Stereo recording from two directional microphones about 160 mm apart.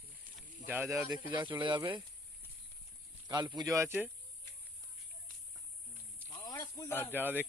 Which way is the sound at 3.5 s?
20° right (ahead or behind).